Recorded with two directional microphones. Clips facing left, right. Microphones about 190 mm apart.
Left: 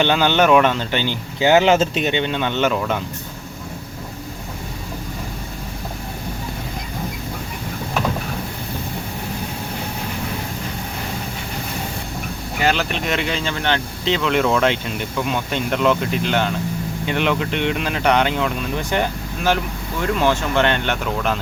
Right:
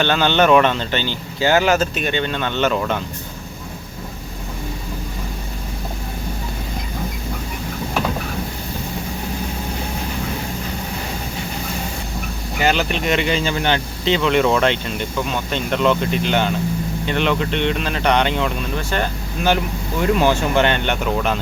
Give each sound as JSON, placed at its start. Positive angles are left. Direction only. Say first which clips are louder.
{"t": 0.0, "sound": "speech", "louder": "even", "side_deg": 10}
{"t": 12.5, "sound": "speech", "louder": "right 1 dB", "side_deg": 0}
{"t": 18.8, "sound": "speech", "louder": "left 2 dB", "side_deg": 15}
{"t": 19.4, "sound": "speech", "louder": "right 2 dB", "side_deg": -5}